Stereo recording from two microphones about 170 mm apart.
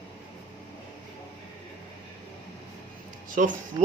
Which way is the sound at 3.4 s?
50° right (ahead or behind).